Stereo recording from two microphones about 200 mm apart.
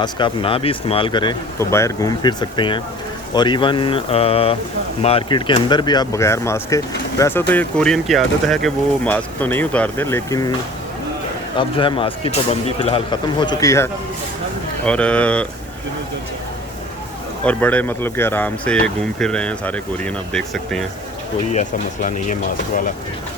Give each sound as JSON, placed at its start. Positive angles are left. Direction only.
{"t": 0.0, "sound": "speech", "side_deg": 25}
{"t": 11.5, "sound": "speech", "side_deg": 25}
{"t": 17.4, "sound": "speech", "side_deg": 5}
{"t": 21.5, "sound": "speech", "side_deg": 40}